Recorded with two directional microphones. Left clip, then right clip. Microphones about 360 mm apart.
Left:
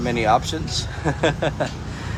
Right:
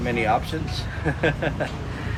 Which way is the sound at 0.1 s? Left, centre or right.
Centre.